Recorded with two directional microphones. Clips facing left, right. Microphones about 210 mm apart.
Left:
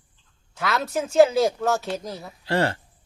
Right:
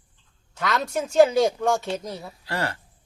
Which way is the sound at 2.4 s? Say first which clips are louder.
Left 7 dB; 25° left (ahead or behind).